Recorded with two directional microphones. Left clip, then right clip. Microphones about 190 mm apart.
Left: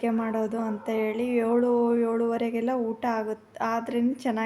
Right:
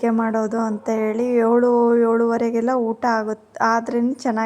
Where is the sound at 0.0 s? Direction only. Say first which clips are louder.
Right 7 dB; 25° right (ahead or behind).